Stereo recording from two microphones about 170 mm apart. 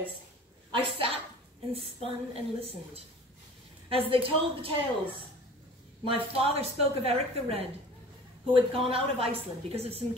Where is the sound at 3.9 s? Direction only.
30° right (ahead or behind).